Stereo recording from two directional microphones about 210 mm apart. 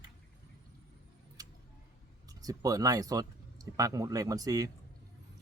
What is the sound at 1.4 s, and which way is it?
Tick-tock, 15° right (ahead or behind).